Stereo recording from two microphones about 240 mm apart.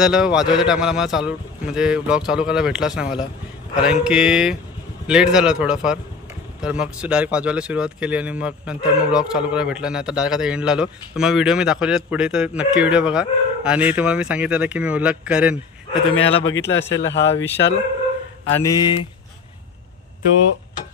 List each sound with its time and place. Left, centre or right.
0.0 s speech: centre
15.9 s a man's voice: left
16.4 s speech: left
18.6 s speech: centre